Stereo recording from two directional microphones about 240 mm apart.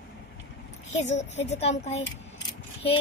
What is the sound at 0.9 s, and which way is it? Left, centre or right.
Speech, left.